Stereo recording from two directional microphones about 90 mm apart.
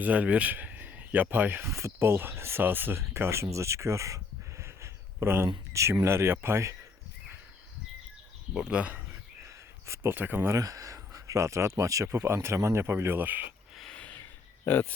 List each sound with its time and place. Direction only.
0.0 s speech: 15° right (ahead or behind)
8.5 s speech: 15° right (ahead or behind)
9.8 s speech: 30° right (ahead or behind)
10.6 s speech: 40° right (ahead or behind); by 13.4 s 20° right (ahead or behind)
13.7 s a sound: 5° left (ahead or behind)
14.6 s speech: 20° left (ahead or behind)